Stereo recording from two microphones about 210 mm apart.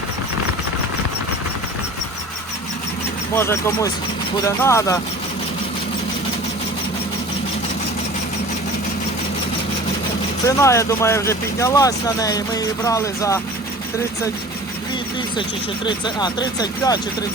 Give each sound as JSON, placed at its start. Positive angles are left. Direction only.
{"t": 3.3, "sound": "speech", "side_deg": 10}
{"t": 10.4, "sound": "speech", "side_deg": 15}
{"t": 15.4, "sound": "speech", "side_deg": 20}